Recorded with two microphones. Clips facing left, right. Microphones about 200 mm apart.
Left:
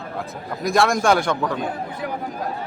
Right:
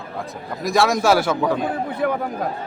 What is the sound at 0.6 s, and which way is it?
A man's voice, centre (ahead or behind).